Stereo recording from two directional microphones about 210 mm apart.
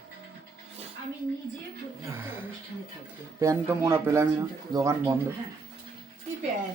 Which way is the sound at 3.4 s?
15° right (ahead or behind).